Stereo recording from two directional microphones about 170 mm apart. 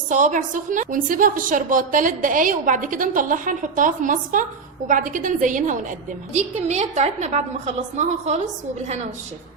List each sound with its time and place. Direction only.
0.1 s a woman's voice: 50° right (ahead or behind)